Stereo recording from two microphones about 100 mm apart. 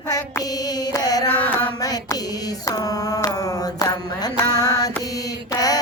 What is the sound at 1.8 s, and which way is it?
Mantra, 40° left (ahead or behind).